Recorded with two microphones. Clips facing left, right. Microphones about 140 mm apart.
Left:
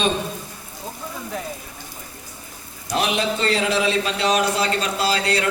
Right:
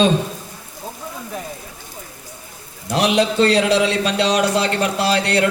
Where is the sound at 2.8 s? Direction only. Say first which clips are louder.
Right 5 dB; 80° right.